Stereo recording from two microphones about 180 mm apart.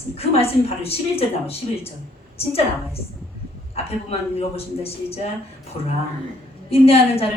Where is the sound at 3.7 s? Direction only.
35° left (ahead or behind).